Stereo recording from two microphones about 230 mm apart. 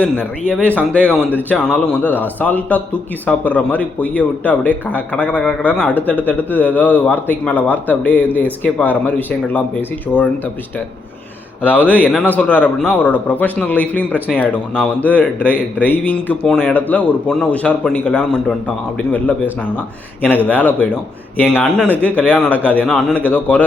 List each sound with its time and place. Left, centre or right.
0.0 s a man's voice: centre
11.6 s a man's voice: centre